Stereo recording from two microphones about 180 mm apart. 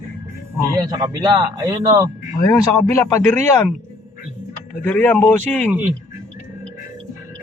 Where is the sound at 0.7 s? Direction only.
20° right (ahead or behind).